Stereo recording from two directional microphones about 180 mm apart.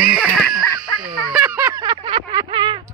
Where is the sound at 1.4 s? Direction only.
20° right (ahead or behind).